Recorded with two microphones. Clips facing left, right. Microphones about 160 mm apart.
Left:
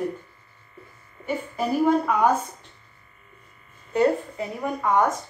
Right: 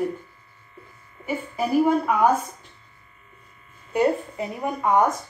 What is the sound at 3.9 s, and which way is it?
Speech, 15° right (ahead or behind).